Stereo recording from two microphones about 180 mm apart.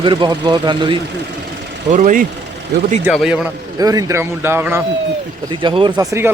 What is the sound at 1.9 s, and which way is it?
Speech, 45° right (ahead or behind).